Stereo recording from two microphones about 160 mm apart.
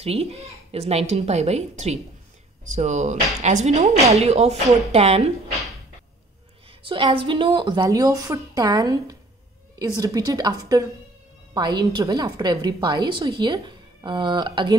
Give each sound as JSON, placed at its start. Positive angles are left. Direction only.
{"t": 0.0, "sound": "a woman's voice", "side_deg": -40}
{"t": 6.8, "sound": "a woman's voice", "side_deg": -30}